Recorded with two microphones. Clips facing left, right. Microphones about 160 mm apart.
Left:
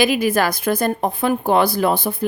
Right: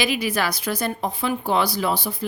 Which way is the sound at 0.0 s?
50° left (ahead or behind).